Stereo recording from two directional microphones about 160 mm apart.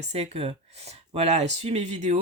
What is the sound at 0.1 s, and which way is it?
Speech, 40° right (ahead or behind).